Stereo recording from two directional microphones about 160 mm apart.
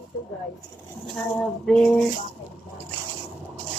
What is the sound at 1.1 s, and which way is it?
Speech, 5° left (ahead or behind).